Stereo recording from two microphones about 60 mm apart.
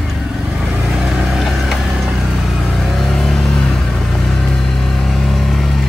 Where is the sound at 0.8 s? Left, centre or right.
Centre.